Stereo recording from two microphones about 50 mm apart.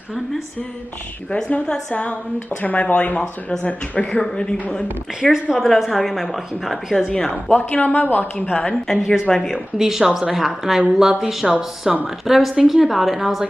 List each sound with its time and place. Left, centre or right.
1.3 s a woman's voice: left
3.2 s a woman's voice: centre
5.3 s a woman's voice: centre
7.4 s a woman's voice: left
8.6 s a woman's voice: centre
9.8 s a woman's voice: centre